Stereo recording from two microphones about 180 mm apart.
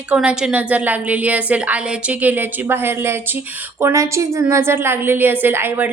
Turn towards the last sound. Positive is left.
turn(degrees=-10)  # may be behind; listen again after turning